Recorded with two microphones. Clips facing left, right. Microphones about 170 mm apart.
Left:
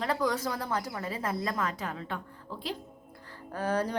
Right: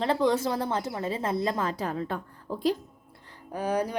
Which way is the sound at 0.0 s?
25° right (ahead or behind).